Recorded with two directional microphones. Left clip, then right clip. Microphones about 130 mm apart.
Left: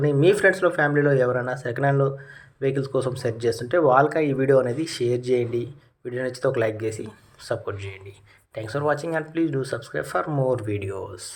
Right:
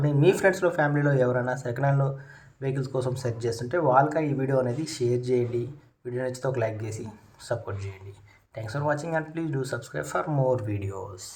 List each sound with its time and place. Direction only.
0.0 s speech: 15° left (ahead or behind)